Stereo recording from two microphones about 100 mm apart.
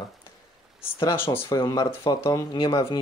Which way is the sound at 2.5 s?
50° left (ahead or behind).